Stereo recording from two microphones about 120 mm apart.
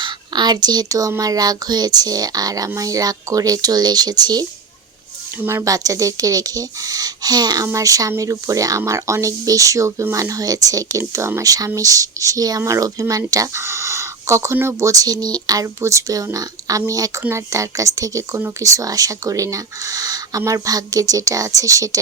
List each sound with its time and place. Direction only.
0.0 s speech: 35° right (ahead or behind)
5.4 s speech: 20° right (ahead or behind)